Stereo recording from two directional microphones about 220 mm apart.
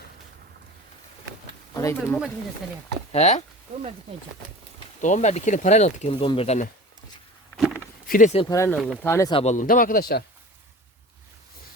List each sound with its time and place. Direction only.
1.7 s speech: 15° left (ahead or behind)
3.1 s speech: 30° left (ahead or behind)
4.9 s speech: 35° left (ahead or behind)
8.0 s speech: 35° left (ahead or behind)
8.4 s speech: 15° left (ahead or behind)
9.3 s speech: 30° left (ahead or behind)